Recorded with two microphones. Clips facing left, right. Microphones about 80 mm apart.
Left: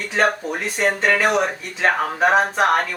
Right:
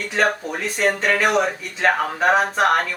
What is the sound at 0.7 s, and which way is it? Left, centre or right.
Speech, left.